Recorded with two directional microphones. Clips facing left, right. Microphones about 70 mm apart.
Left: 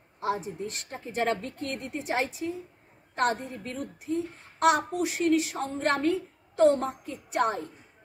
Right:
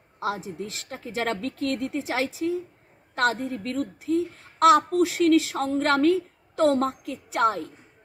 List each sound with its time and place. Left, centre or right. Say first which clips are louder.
0.2 s a woman's voice: right 1 dB; right